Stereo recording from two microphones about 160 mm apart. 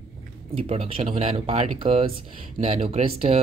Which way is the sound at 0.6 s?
35° right (ahead or behind).